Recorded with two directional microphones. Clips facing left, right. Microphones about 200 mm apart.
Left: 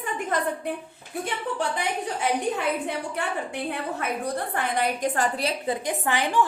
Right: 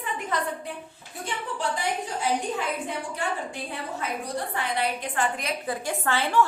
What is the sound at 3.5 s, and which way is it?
Speech, 60° left (ahead or behind).